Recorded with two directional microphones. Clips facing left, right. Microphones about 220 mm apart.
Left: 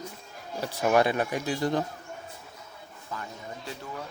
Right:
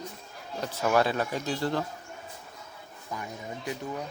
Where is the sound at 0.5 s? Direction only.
15° left (ahead or behind).